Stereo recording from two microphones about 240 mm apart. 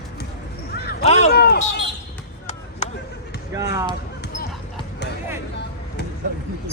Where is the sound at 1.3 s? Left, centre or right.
Left.